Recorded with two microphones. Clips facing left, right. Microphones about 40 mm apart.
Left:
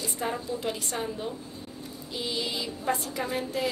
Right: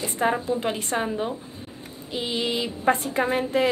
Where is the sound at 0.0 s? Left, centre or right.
Right.